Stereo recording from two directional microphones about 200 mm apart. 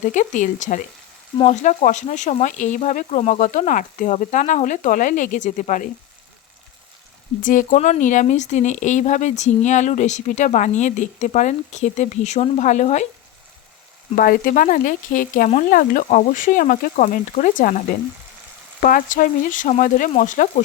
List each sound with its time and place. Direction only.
0.0 s speech: 40° left (ahead or behind)
7.4 s speech: 40° left (ahead or behind)
14.2 s speech: 45° left (ahead or behind)